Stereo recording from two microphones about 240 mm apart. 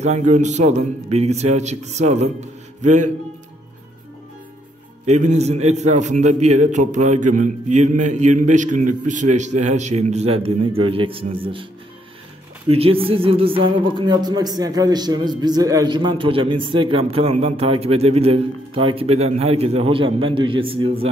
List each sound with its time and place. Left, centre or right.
0.0 s a man's voice: right
5.0 s speech: right
12.6 s speech: right